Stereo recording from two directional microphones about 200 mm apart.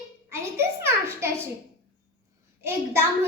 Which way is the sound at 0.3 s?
15° right (ahead or behind).